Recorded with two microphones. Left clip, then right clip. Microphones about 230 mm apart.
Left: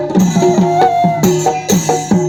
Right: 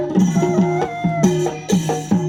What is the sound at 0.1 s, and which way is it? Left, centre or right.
Music, left.